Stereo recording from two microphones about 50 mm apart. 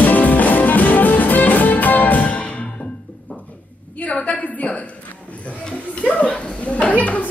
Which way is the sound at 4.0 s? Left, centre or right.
Left.